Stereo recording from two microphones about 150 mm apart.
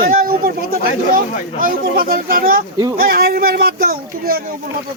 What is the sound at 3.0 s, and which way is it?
Speech, 90° right.